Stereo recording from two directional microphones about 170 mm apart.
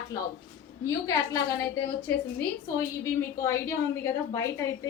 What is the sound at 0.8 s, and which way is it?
Speech, 20° left (ahead or behind).